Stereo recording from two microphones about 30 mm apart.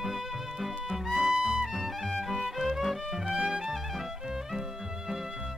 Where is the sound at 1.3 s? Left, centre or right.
Right.